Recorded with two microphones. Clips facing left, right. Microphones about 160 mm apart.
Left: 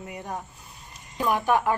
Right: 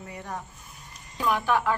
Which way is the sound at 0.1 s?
20° left (ahead or behind).